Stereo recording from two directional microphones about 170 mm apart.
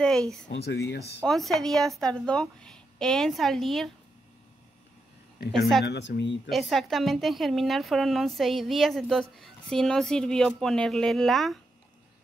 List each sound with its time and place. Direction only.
0.0 s a woman's voice: 5° left (ahead or behind)
0.5 s speech: 85° left
1.2 s a woman's voice: centre (ahead or behind)
5.9 s speech: 90° left
6.5 s a woman's voice: centre (ahead or behind)